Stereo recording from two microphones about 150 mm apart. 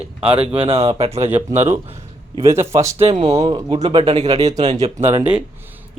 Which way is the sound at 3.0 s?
40° right (ahead or behind).